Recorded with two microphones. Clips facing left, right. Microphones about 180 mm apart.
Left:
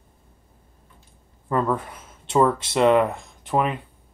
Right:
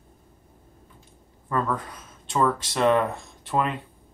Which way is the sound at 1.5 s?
25° left (ahead or behind).